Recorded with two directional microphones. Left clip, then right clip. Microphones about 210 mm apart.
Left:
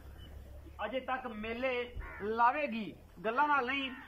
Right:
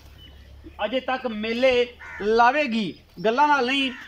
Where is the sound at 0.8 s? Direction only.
30° right (ahead or behind).